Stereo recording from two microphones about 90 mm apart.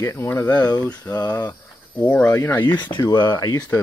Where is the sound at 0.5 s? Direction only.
50° left (ahead or behind).